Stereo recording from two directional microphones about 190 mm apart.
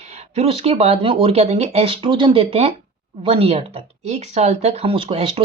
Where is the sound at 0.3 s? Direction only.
30° right (ahead or behind).